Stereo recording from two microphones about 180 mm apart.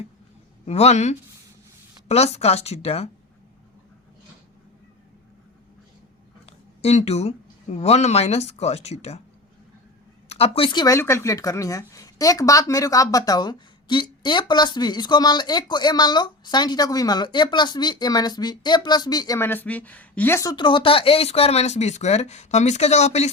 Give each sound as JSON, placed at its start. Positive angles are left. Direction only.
{"t": 0.6, "sound": "a woman's voice", "side_deg": 35}
{"t": 6.4, "sound": "speech", "side_deg": 35}
{"t": 10.2, "sound": "speech", "side_deg": 35}